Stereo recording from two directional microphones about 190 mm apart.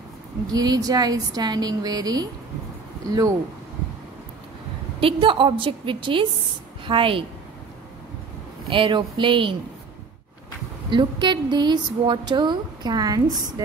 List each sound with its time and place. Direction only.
0.5 s a woman's voice: 20° right (ahead or behind)
5.0 s a woman's voice: 25° right (ahead or behind)
8.6 s a woman's voice: 25° right (ahead or behind)
10.9 s a woman's voice: 25° right (ahead or behind)